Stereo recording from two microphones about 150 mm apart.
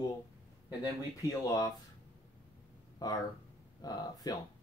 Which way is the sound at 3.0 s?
25° left (ahead or behind).